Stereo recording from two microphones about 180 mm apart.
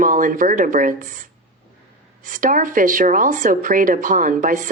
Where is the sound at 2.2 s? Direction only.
50° right (ahead or behind).